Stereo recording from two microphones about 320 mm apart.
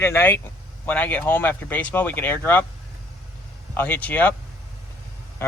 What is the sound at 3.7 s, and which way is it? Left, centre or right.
Speech, centre.